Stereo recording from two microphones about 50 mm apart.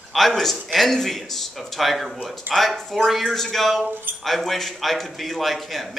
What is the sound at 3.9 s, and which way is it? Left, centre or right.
Speech, right.